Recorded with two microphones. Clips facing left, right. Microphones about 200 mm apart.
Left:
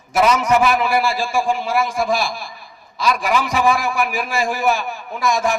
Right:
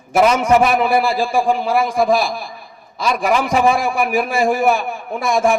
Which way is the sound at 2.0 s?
50° right (ahead or behind).